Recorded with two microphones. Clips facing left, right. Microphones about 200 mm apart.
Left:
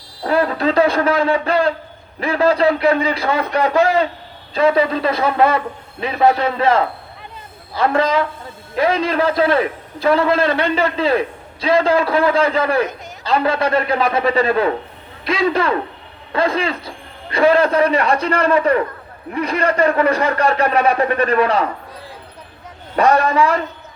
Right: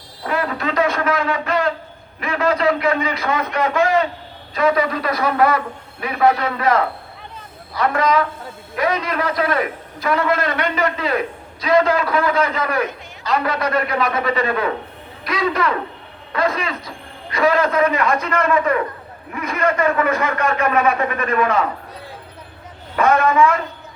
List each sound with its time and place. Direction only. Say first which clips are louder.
0.3 s a man's voice: left 5 dB; 30° left (ahead or behind)
23.0 s a man's voice: left 1 dB; 35° left (ahead or behind)